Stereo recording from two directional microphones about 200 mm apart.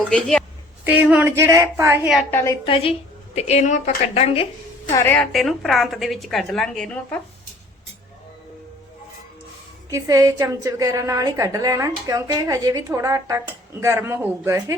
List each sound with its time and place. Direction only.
0.1 s a woman's voice: 5° left (ahead or behind)
0.9 s a woman's voice: 5° right (ahead or behind)
2.3 s a woman's voice: 15° left (ahead or behind)
2.6 s a woman's voice: 30° left (ahead or behind)
4.9 s a woman's voice: 10° left (ahead or behind)
9.9 s a woman's voice: 15° right (ahead or behind)